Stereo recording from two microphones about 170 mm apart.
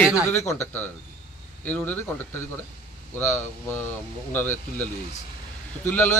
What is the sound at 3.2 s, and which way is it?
Speech, 15° left (ahead or behind).